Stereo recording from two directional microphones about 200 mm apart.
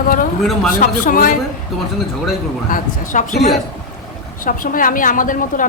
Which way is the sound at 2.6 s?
40° left (ahead or behind).